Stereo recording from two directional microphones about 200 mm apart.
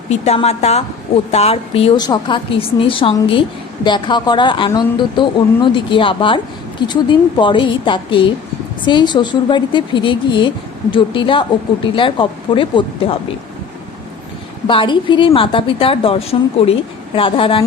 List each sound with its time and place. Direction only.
0.1 s a woman's voice: 30° left (ahead or behind)
14.7 s a woman's voice: 25° left (ahead or behind)